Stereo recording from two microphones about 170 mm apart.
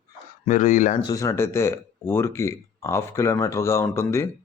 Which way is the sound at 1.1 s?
20° left (ahead or behind).